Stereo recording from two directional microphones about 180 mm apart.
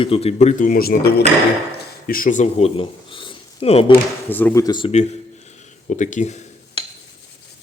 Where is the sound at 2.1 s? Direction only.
50° left (ahead or behind); by 3.9 s 35° left (ahead or behind).